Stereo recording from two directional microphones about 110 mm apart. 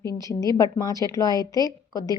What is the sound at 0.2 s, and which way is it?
A woman's voice, 30° left (ahead or behind).